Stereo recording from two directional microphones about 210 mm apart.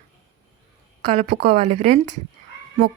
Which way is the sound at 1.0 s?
35° right (ahead or behind).